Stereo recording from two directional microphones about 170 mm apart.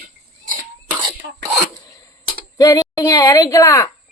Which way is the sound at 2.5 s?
20° left (ahead or behind).